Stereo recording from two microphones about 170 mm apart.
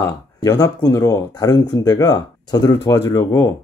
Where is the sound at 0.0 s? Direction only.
20° left (ahead or behind).